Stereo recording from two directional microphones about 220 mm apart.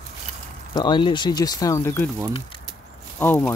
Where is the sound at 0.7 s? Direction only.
20° left (ahead or behind).